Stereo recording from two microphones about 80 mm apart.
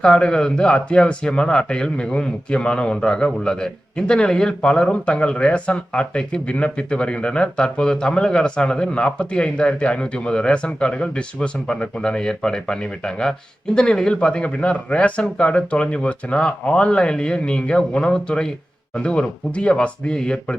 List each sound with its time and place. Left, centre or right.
0.0 s speech: centre